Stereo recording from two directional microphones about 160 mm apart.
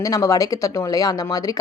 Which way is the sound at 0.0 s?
20° left (ahead or behind).